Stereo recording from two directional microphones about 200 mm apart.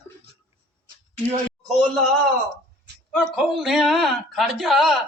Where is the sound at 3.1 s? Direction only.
Centre (ahead or behind).